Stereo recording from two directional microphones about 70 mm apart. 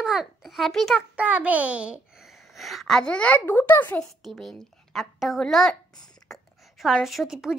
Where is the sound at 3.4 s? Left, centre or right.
Left.